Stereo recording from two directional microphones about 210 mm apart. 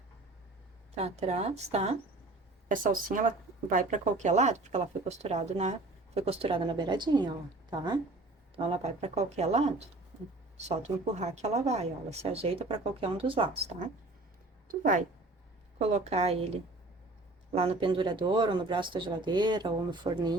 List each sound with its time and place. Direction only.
0.9 s speech: 30° right (ahead or behind)
14.7 s speech: 40° right (ahead or behind)
17.5 s speech: 25° right (ahead or behind)